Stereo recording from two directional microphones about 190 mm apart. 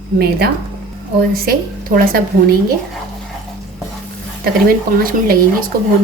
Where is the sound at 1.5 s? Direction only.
50° right (ahead or behind).